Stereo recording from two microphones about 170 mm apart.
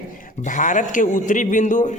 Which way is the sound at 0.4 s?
50° left (ahead or behind).